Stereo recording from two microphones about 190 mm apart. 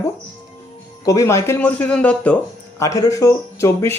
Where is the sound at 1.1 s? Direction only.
15° left (ahead or behind).